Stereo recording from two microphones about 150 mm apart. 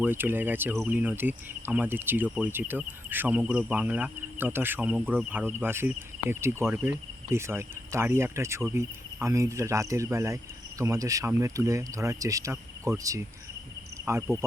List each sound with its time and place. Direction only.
0.0 s speech: 15° right (ahead or behind)